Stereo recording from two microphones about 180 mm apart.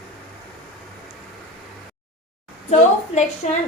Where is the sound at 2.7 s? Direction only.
40° left (ahead or behind).